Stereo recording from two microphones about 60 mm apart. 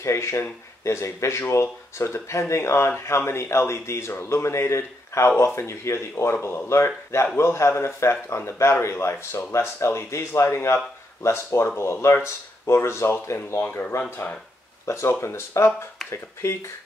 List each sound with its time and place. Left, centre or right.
0.0 s speech: left
13.7 s speech: left
14.9 s speech: left